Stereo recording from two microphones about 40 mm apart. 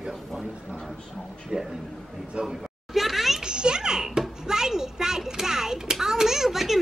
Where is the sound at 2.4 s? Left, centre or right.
Centre.